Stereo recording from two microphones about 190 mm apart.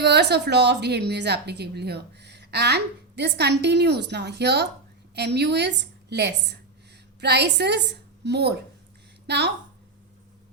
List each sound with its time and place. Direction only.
0.0 s a woman's voice: 60° right (ahead or behind)